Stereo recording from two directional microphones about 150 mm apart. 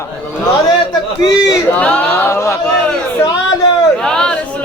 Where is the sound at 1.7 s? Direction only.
10° left (ahead or behind).